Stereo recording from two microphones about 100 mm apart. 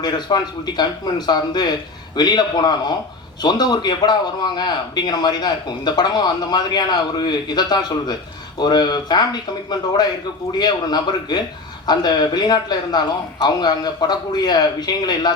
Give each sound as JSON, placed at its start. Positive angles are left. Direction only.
{"t": 0.0, "sound": "a man's voice", "side_deg": 45}